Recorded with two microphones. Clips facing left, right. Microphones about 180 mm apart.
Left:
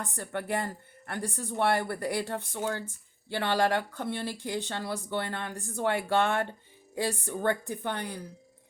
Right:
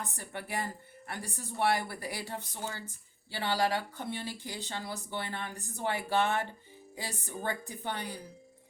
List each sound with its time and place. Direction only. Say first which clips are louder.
0.0 s speech: left 6 dB; 55° left (ahead or behind)